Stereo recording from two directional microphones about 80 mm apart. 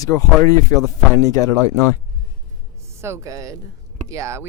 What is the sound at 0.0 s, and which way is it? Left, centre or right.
Speech, left.